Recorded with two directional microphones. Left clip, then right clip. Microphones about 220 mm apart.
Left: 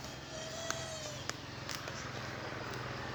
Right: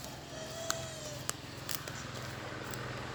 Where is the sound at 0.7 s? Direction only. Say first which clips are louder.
Right 1 dB; 40° right (ahead or behind).